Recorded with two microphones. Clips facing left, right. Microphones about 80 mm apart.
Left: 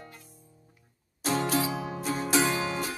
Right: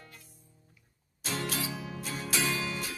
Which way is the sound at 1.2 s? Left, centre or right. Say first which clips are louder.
Left 8 dB; left.